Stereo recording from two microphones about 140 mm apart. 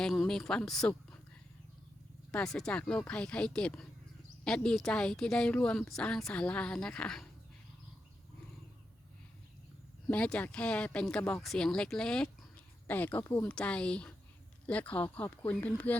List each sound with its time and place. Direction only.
0.0 s a woman's voice: centre (ahead or behind)
2.3 s a woman's voice: 5° left (ahead or behind)
10.1 s a woman's voice: 10° left (ahead or behind)
13.5 s speech: 10° left (ahead or behind)